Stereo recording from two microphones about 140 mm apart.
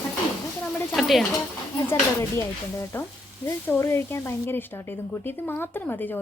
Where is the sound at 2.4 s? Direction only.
20° left (ahead or behind).